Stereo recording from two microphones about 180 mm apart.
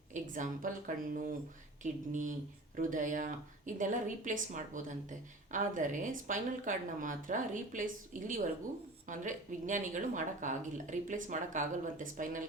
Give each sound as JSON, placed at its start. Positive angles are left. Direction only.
{"t": 0.1, "sound": "speech", "side_deg": -45}